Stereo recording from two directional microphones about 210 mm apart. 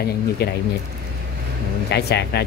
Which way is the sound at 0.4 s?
50° left (ahead or behind).